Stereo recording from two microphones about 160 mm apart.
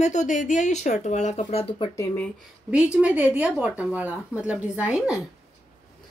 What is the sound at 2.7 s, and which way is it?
Speech, 10° right (ahead or behind).